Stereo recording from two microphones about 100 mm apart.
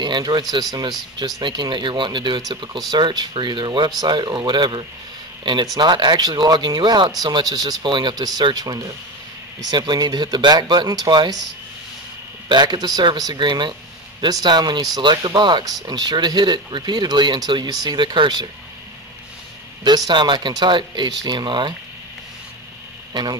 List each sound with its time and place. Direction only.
0.0 s speech: 45° right (ahead or behind)
12.4 s speech: 45° right (ahead or behind)
20.1 s speech: 50° right (ahead or behind)